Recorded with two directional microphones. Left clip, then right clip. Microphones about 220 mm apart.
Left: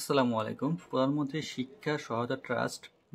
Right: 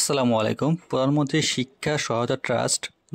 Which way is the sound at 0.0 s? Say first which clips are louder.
Right 7 dB; 40° right (ahead or behind).